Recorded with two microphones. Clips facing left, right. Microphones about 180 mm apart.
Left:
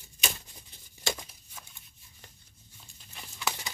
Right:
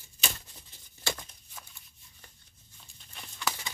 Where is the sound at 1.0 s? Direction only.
10° left (ahead or behind).